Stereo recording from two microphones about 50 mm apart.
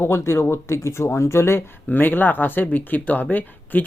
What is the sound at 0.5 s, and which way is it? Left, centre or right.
Speech, left.